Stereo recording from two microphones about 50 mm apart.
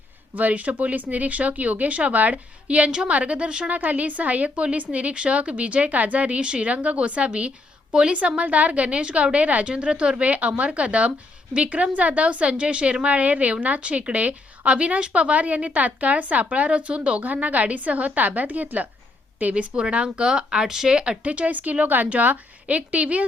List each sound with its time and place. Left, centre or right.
0.3 s a woman's voice: right
21.2 s a woman's voice: right